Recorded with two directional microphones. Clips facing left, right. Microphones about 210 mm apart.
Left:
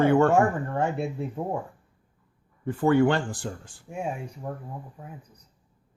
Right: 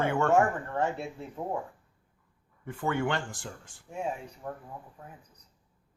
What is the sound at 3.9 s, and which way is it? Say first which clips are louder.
Speech: left 3 dB; 10° left (ahead or behind).